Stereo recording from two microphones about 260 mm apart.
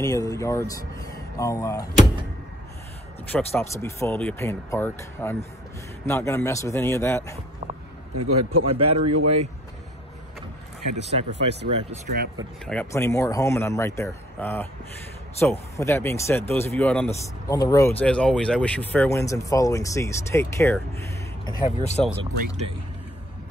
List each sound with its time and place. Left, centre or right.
0.0 s speech: centre
3.3 s speech: centre
7.6 s a sound: right
8.1 s a man's voice: right
8.6 s speech: right
9.0 s speech: right
11.9 s speech: right
12.6 s speech: centre; by 22.0 s left
22.1 s speech: centre